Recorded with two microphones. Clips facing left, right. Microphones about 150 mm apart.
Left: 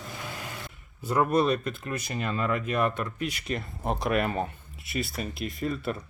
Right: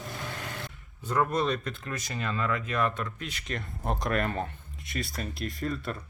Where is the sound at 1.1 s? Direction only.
10° left (ahead or behind).